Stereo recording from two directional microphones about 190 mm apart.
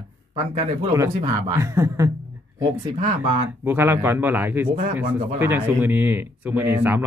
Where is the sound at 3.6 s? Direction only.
10° right (ahead or behind).